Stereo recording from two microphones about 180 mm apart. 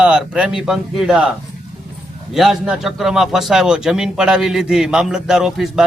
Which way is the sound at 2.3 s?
Centre (ahead or behind).